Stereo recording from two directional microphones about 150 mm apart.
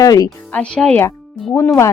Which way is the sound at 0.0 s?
25° left (ahead or behind).